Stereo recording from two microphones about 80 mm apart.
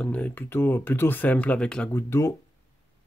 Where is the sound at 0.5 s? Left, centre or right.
Left; by 1.9 s centre.